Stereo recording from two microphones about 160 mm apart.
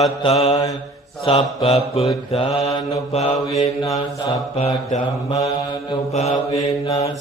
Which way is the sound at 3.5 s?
20° left (ahead or behind).